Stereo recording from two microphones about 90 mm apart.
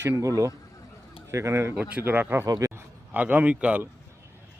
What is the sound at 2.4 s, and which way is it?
Speech, 45° right (ahead or behind).